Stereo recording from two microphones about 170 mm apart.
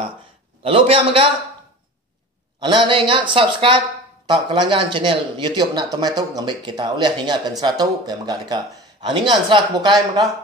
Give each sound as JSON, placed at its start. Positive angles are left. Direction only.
{"t": 0.6, "sound": "a man's voice", "side_deg": -35}
{"t": 2.9, "sound": "speech", "side_deg": -30}